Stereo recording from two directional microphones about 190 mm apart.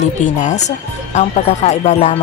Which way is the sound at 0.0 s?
40° left (ahead or behind).